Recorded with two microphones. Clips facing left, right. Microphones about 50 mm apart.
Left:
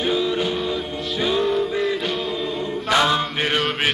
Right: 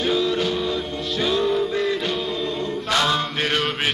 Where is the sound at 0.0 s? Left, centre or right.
Centre.